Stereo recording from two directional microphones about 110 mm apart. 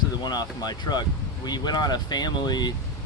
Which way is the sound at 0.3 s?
40° left (ahead or behind).